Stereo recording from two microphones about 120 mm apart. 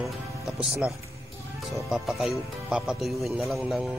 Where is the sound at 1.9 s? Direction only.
Centre (ahead or behind).